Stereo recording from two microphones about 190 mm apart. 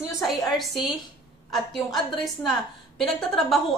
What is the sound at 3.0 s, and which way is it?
Speech, centre (ahead or behind).